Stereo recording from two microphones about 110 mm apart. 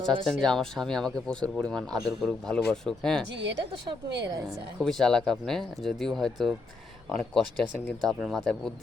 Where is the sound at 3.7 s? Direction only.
50° right (ahead or behind).